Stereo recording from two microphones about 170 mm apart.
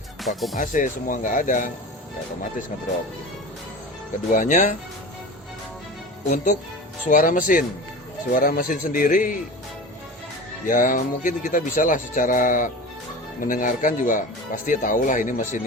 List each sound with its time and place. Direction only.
0.2 s speech: centre (ahead or behind)
0.5 s speech: 50° left (ahead or behind)
4.3 s speech: 50° left (ahead or behind)
6.3 s speech: 45° left (ahead or behind)
10.7 s speech: 50° left (ahead or behind)